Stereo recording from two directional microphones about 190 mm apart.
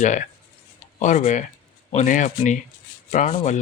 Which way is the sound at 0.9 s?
40° left (ahead or behind).